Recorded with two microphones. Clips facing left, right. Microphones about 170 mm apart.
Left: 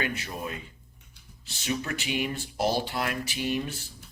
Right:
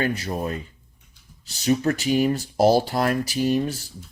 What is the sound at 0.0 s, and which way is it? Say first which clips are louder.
Speech: right 7 dB; 40° right (ahead or behind).